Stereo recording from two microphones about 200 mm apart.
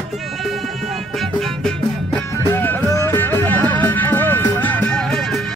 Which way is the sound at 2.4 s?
10° left (ahead or behind).